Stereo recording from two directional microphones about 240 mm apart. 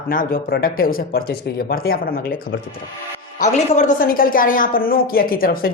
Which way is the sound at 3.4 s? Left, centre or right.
Left.